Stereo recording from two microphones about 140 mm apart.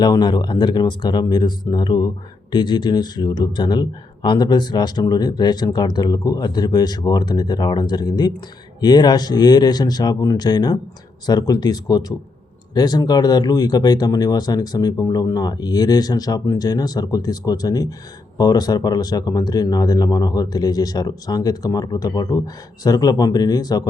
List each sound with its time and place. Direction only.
0.0 s speech: 30° left (ahead or behind)